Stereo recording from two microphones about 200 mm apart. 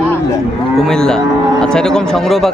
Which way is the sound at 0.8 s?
5° left (ahead or behind).